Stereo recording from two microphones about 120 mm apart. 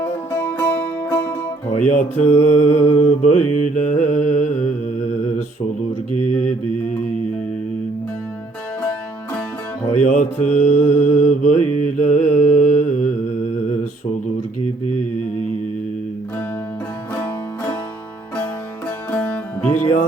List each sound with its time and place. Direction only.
0.0 s music: 20° left (ahead or behind)
1.7 s mantra: 90° left; by 4.7 s 70° left (ahead or behind)
10.0 s mantra: 85° left
17.2 s music: 15° left (ahead or behind)
19.1 s music: 10° left (ahead or behind)